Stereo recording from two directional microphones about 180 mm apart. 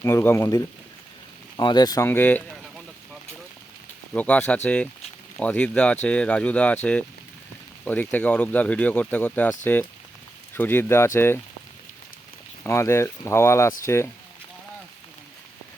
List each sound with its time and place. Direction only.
0.0 s speech: 15° left (ahead or behind)
4.1 s speech: 5° left (ahead or behind)
7.9 s speech: 10° left (ahead or behind)
12.6 s speech: 15° left (ahead or behind)